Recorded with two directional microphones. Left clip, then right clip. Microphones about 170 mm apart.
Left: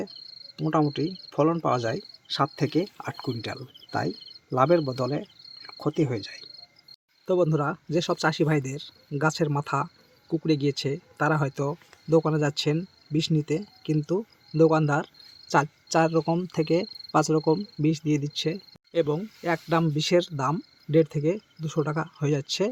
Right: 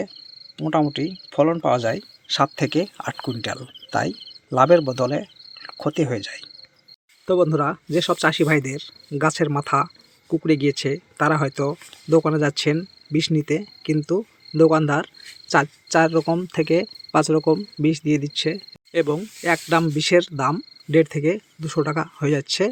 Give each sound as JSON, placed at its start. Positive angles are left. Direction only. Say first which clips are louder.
{"t": 0.5, "sound": "speech", "louder": "right 4 dB", "side_deg": -20}
{"t": 4.9, "sound": "cricket", "louder": "right 7 dB", "side_deg": -15}
{"t": 7.3, "sound": "speech", "louder": "right 5 dB", "side_deg": -15}
{"t": 14.1, "sound": "cricket", "louder": "right 5 dB", "side_deg": -15}
{"t": 17.8, "sound": "speech", "louder": "right 5 dB", "side_deg": -10}